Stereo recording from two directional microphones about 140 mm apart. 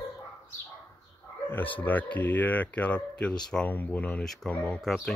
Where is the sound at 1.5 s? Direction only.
10° left (ahead or behind).